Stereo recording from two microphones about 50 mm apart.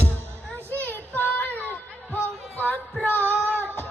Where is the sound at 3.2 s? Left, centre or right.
Right.